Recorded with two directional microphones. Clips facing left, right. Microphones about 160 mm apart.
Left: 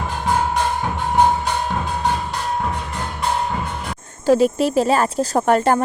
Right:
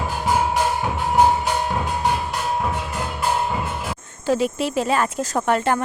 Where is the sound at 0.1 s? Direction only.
5° right (ahead or behind).